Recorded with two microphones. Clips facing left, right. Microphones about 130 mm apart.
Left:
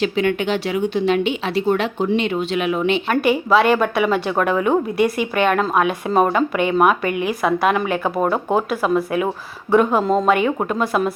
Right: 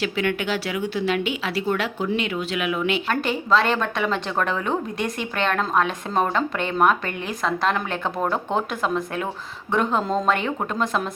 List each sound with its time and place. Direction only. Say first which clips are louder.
0.0 s speech: left 5 dB; 25° left (ahead or behind)
3.1 s a woman's voice: left 5 dB; 10° left (ahead or behind)